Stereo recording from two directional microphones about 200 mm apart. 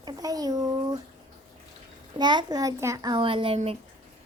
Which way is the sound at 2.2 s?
20° right (ahead or behind).